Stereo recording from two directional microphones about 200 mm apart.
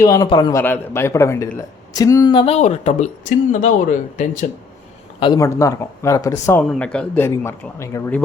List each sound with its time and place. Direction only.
0.0 s a man's voice: 20° left (ahead or behind); by 4.4 s 35° left (ahead or behind)
5.2 s speech: 20° left (ahead or behind)